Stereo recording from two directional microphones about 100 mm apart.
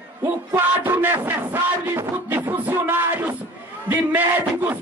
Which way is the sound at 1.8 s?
20° right (ahead or behind).